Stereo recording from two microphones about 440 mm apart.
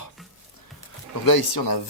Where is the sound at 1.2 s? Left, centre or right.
Left.